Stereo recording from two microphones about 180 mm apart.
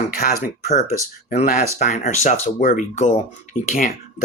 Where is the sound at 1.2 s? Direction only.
45° left (ahead or behind).